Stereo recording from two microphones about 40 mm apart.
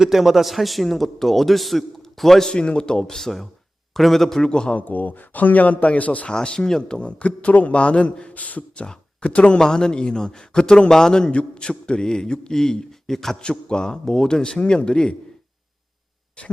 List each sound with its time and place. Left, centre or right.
0.0 s a man's voice: centre
2.5 s a man's voice: left
3.2 s a man's voice: centre
4.4 s a man's voice: centre
4.7 s speech: left
6.2 s a man's voice: left
7.0 s speech: left
8.8 s speech: left
9.6 s a man's voice: centre
13.4 s a man's voice: left